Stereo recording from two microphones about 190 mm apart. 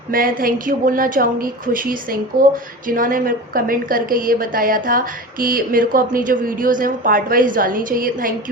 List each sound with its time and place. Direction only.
0.1 s a woman's voice: 50° right (ahead or behind)